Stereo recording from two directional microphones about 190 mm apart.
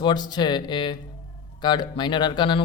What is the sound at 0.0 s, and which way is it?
A man's voice, 20° left (ahead or behind).